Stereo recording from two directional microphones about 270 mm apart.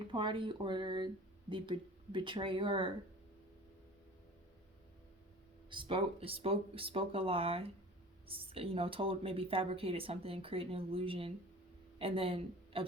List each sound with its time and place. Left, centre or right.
0.1 s speech: centre
5.7 s speech: right